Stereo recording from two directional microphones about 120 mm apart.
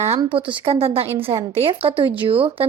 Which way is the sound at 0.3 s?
45° right (ahead or behind).